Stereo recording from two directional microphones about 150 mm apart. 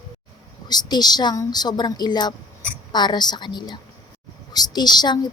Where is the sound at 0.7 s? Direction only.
25° left (ahead or behind).